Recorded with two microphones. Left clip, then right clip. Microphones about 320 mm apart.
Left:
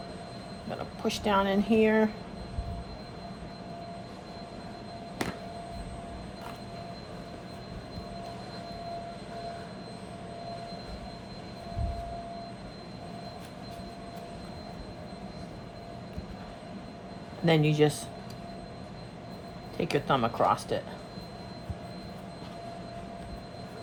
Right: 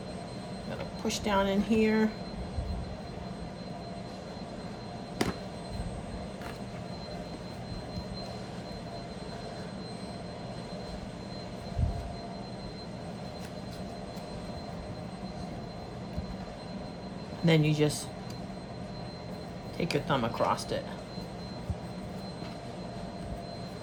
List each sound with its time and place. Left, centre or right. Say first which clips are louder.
1.0 s a woman's voice: left 2 dB; centre
17.4 s speech: left 3 dB; centre
19.7 s speech: left 3 dB; centre